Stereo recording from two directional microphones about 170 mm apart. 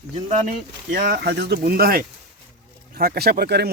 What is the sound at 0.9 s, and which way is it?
Speech, 75° right (ahead or behind).